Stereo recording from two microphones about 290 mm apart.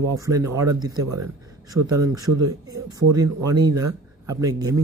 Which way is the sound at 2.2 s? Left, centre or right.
Right.